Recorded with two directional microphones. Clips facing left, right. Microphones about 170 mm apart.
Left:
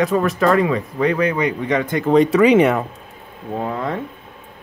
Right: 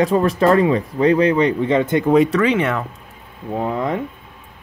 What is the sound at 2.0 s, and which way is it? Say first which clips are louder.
Speech: left 2 dB; 5° right (ahead or behind).